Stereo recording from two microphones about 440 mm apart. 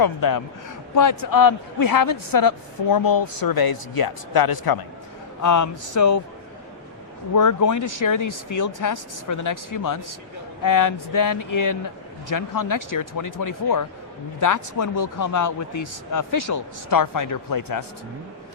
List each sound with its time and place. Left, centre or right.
0.0 s a woman's voice: left
5.4 s speech: left
7.3 s a woman's voice: left